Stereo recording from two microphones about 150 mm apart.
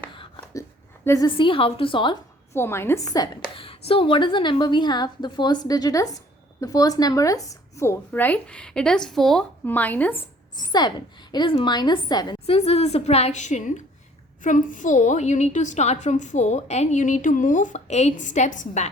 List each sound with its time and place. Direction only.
1.0 s a woman's voice: 20° left (ahead or behind)
1.4 s a woman's voice: 35° left (ahead or behind)
2.5 s a woman's voice: 15° left (ahead or behind)
3.6 s a woman's voice: 40° left (ahead or behind); by 10.2 s 10° left (ahead or behind)
10.6 s a woman's voice: 30° left (ahead or behind)
12.5 s a woman's voice: 45° left (ahead or behind)